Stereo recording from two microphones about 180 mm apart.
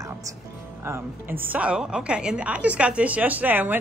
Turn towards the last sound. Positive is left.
turn(degrees=-10)  # may be behind; listen again after turning